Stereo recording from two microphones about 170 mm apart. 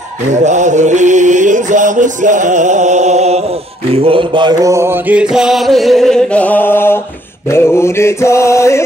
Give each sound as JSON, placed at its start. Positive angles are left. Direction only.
{"t": 0.3, "sound": "mantra", "side_deg": -45}
{"t": 5.3, "sound": "chant", "side_deg": 0}